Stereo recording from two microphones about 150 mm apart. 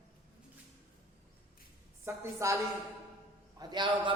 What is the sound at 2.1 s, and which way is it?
Speech, 20° right (ahead or behind).